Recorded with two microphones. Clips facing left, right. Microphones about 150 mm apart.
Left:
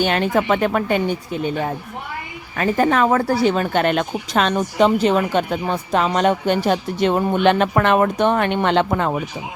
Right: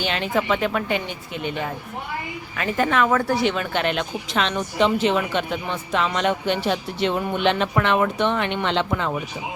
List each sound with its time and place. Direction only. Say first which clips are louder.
0.0 s a woman's voice: left 5 dB; 50° left (ahead or behind)
2.6 s a woman's voice: left 4 dB; 40° left (ahead or behind)